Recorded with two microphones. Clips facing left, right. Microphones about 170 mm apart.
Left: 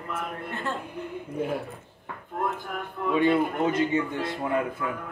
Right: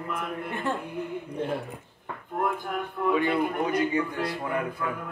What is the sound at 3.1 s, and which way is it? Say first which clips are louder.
Speech: left 5 dB; 25° left (ahead or behind).